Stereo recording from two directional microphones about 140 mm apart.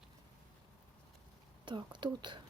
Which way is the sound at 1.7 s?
35° right (ahead or behind).